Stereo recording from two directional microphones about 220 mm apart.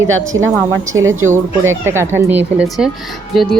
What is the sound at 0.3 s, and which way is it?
Speech, 15° right (ahead or behind).